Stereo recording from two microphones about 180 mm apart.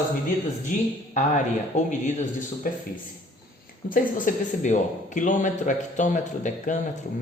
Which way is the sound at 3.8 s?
50° left (ahead or behind).